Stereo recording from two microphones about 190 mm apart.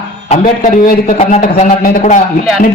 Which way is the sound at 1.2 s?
40° left (ahead or behind).